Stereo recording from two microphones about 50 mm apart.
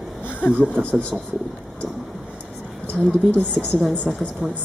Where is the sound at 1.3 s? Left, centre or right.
Centre.